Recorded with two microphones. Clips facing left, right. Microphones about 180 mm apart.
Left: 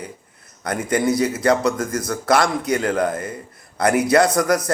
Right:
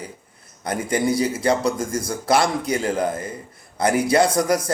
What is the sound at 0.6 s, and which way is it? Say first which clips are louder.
A man's voice: left 2 dB; 30° right (ahead or behind).